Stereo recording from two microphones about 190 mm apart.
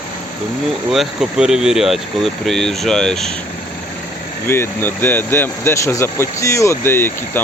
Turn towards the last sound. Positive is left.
turn(degrees=10)  # may be behind; listen again after turning